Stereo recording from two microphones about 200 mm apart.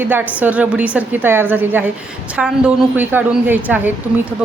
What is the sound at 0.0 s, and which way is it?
A woman's voice, 10° right (ahead or behind).